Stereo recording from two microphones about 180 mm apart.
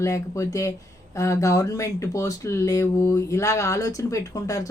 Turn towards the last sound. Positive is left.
turn(degrees=20)  # may be behind; listen again after turning